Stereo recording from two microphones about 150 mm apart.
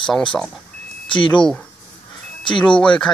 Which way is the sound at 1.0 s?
35° left (ahead or behind).